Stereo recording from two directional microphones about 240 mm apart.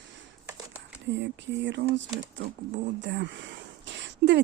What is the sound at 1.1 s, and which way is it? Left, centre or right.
Speech, right.